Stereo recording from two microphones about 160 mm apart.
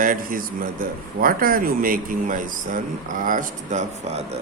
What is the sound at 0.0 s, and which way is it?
A man's voice, 60° right (ahead or behind).